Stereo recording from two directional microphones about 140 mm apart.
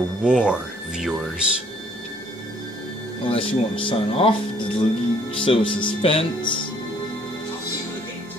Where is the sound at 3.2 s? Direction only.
40° left (ahead or behind).